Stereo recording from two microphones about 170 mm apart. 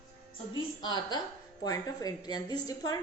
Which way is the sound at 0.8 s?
25° left (ahead or behind).